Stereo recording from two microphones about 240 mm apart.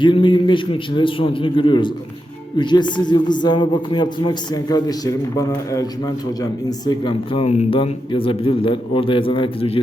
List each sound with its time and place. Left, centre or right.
0.0 s a man's voice: left